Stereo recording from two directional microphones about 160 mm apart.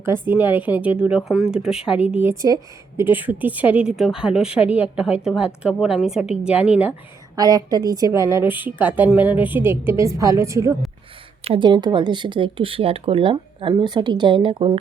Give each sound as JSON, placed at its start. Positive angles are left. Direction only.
{"t": 0.0, "sound": "a woman's voice", "side_deg": -15}
{"t": 7.3, "sound": "a woman's voice", "side_deg": -25}
{"t": 11.4, "sound": "speech", "side_deg": -35}